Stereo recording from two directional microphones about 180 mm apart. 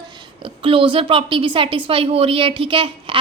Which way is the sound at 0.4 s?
30° right (ahead or behind).